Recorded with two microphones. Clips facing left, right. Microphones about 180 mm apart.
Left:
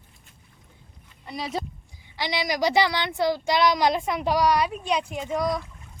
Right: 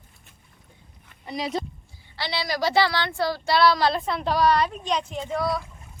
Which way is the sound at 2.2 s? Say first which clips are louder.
Left 2 dB; 15° left (ahead or behind).